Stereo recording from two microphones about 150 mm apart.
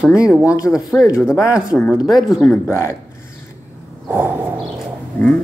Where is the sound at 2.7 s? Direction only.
20° left (ahead or behind).